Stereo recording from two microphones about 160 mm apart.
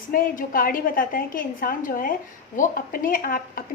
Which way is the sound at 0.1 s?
60° left (ahead or behind).